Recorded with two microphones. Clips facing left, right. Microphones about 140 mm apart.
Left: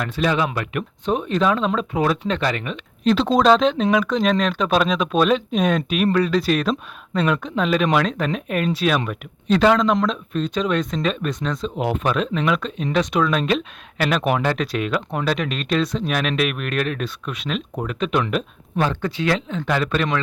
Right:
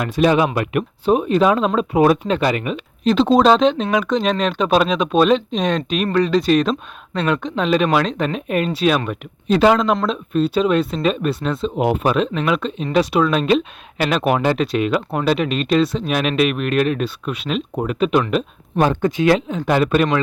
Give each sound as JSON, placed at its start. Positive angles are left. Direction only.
{"t": 0.0, "sound": "speech", "side_deg": -15}
{"t": 18.8, "sound": "speech", "side_deg": -15}